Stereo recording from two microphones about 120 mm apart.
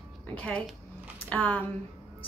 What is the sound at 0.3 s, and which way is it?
A woman's voice, 10° left (ahead or behind).